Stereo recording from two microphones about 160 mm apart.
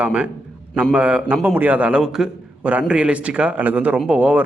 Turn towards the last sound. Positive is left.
turn(degrees=-10)  # may be behind; listen again after turning